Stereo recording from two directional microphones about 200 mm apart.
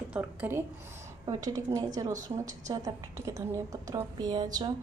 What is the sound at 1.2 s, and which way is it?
Speech, 20° right (ahead or behind).